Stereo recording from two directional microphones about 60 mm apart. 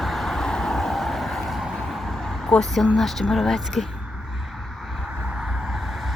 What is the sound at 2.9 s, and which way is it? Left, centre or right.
Speech, centre.